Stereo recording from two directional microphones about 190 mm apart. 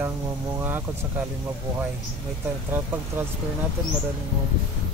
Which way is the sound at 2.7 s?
10° right (ahead or behind).